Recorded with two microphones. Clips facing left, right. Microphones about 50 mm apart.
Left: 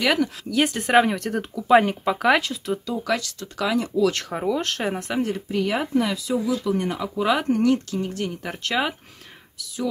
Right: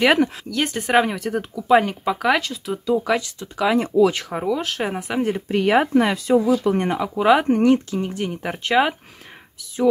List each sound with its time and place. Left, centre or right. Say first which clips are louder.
0.0 s speech: right 5 dB; right
0.5 s speech: even; centre
2.9 s speech: right 9 dB; centre
3.7 s speech: right 4 dB; right
4.1 s speech: right 1 dB; centre
5.5 s speech: right 8 dB; right
7.0 s speech: right 6 dB; centre